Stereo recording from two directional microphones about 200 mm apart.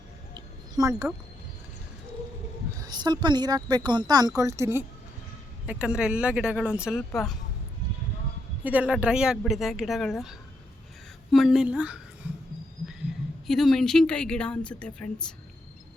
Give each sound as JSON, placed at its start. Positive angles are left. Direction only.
{"t": 0.3, "sound": "a sound", "side_deg": -15}
{"t": 2.8, "sound": "a woman's voice", "side_deg": -20}
{"t": 8.6, "sound": "speech", "side_deg": -5}
{"t": 13.5, "sound": "speech", "side_deg": 0}